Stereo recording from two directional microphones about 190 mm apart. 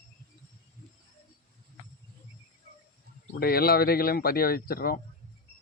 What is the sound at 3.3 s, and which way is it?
Speech, 55° left (ahead or behind).